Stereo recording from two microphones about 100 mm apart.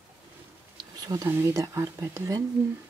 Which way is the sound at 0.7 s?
40° right (ahead or behind).